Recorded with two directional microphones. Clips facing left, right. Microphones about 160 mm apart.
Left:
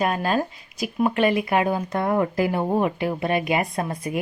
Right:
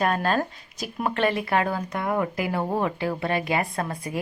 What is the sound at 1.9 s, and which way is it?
Speech, 25° left (ahead or behind).